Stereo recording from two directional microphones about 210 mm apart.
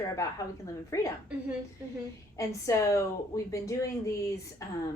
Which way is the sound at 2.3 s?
15° left (ahead or behind).